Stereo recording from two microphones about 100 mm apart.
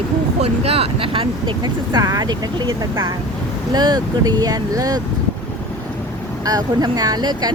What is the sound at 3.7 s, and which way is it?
A woman's voice, 45° right (ahead or behind).